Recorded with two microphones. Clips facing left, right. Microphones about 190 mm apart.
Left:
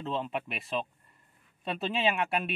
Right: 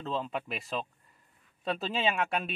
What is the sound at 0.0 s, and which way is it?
Speech, centre (ahead or behind).